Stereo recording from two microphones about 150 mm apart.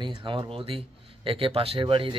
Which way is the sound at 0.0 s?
35° right (ahead or behind).